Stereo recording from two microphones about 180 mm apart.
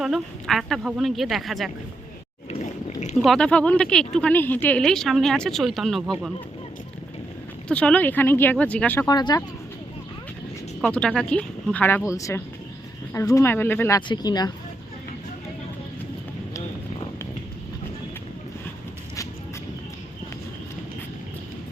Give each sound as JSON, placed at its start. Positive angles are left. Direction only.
{"t": 0.0, "sound": "speech", "side_deg": 0}
{"t": 2.5, "sound": "boat", "side_deg": 40}
{"t": 3.2, "sound": "speech", "side_deg": 5}
{"t": 7.7, "sound": "speech", "side_deg": 5}
{"t": 9.0, "sound": "speech", "side_deg": 20}
{"t": 10.8, "sound": "speech", "side_deg": 5}